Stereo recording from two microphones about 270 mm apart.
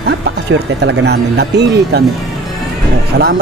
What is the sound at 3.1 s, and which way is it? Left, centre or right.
Speech, right.